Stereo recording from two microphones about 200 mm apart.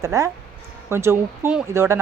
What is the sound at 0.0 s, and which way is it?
Speech, 15° right (ahead or behind).